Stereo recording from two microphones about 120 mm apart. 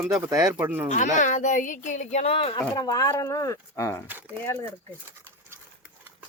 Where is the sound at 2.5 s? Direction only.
35° left (ahead or behind).